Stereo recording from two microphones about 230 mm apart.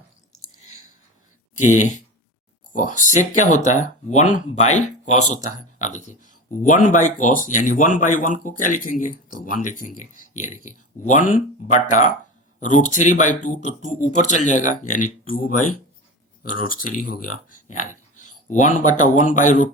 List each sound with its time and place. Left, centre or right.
1.5 s speech: left
16.6 s speech: left
17.7 s dog: left
18.6 s speech: left